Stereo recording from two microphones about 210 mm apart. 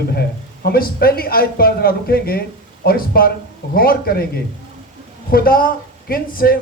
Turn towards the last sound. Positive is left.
turn(degrees=45)  # may be behind; listen again after turning